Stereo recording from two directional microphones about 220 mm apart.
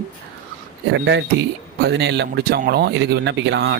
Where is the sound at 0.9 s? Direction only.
55° right (ahead or behind).